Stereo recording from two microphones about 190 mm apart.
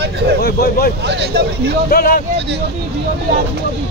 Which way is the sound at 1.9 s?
50° left (ahead or behind).